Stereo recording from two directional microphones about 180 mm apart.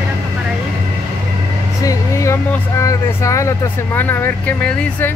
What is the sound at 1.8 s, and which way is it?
Speech, 20° left (ahead or behind).